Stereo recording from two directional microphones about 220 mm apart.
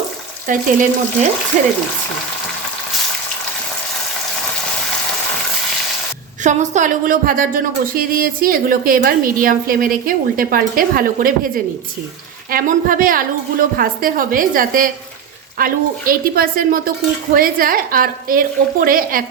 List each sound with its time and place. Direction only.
0.4 s a woman's voice: 35° right (ahead or behind)
6.4 s a woman's voice: 35° right (ahead or behind)
12.5 s a woman's voice: 40° right (ahead or behind)